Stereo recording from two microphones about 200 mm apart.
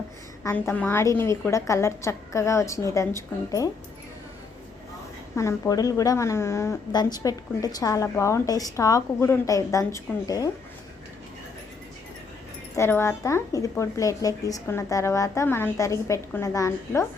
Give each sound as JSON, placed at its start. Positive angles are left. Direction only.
{"t": 0.4, "sound": "a woman's voice", "side_deg": 10}
{"t": 5.4, "sound": "a woman's voice", "side_deg": 15}
{"t": 12.7, "sound": "a woman's voice", "side_deg": 15}